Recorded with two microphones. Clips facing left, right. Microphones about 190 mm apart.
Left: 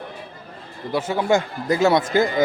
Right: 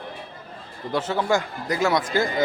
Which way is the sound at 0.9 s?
10° left (ahead or behind).